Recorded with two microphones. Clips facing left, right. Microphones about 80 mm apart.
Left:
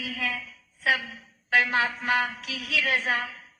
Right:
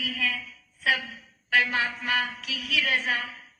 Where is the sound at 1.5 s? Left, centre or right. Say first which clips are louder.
Left 1 dB; left.